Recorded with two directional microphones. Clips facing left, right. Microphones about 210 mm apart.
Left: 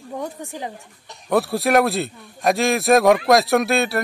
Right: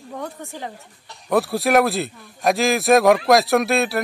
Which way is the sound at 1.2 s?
Centre (ahead or behind).